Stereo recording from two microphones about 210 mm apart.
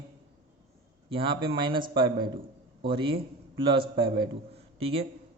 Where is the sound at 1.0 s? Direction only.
25° right (ahead or behind).